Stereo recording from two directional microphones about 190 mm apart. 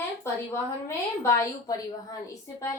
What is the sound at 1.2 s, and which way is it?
Speech, 20° left (ahead or behind).